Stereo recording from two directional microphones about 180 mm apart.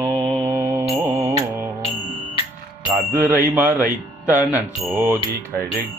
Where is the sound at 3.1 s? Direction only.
10° right (ahead or behind).